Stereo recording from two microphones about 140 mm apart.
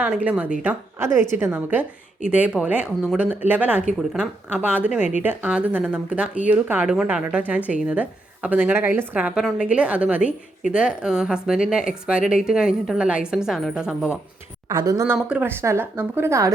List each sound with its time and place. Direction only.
0.0 s a woman's voice: 10° right (ahead or behind)
14.7 s speech: 25° right (ahead or behind)